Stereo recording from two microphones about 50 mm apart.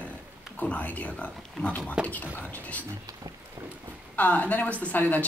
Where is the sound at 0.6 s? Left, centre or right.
Left.